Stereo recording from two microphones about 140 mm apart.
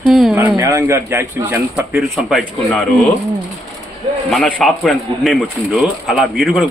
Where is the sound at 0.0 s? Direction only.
Centre (ahead or behind).